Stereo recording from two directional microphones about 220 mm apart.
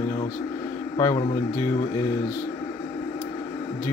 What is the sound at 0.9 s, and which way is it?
Speech, 20° left (ahead or behind).